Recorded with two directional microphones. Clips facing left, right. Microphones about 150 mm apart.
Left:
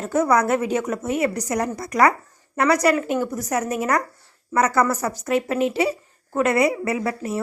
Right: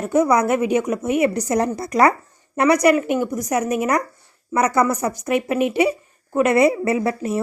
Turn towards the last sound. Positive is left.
turn(degrees=-25)  # may be behind; listen again after turning